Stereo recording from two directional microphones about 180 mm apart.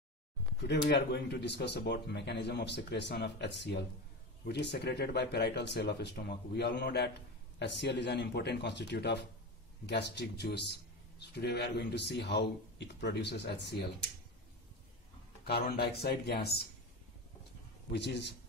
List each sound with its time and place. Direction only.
0.7 s speech: 70° left (ahead or behind)
15.4 s speech: 60° left (ahead or behind)
17.9 s speech: 70° left (ahead or behind)